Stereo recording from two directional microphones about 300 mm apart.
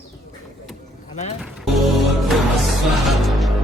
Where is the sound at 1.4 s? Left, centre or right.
Centre.